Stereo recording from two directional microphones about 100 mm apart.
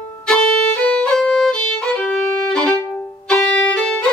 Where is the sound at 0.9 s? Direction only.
10° left (ahead or behind).